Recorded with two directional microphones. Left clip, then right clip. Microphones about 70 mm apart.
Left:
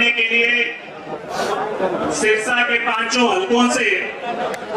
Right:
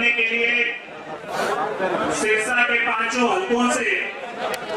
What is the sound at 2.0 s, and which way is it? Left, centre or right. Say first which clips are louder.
A man's voice: left 3 dB; centre.